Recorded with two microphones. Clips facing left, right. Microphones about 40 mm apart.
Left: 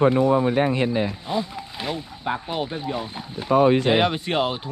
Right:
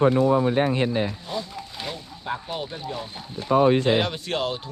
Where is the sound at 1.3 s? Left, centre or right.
Centre.